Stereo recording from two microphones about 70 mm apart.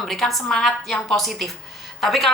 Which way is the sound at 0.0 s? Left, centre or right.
Centre.